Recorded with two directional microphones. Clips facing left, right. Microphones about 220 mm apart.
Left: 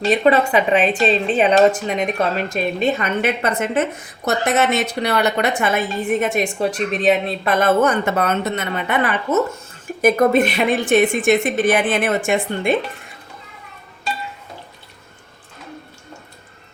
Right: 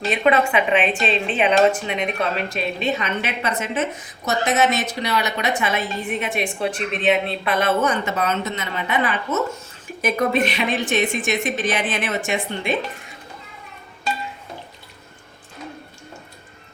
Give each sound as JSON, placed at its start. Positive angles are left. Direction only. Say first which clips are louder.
{"t": 0.1, "sound": "a woman's voice", "louder": "left 3 dB", "side_deg": 40}